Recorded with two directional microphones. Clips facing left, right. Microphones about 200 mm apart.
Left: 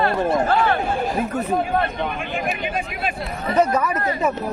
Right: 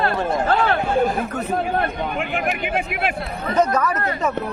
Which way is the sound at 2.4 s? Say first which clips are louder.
Right 2 dB; 70° right (ahead or behind).